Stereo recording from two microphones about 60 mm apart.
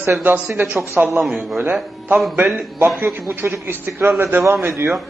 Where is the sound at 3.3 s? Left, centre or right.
Right.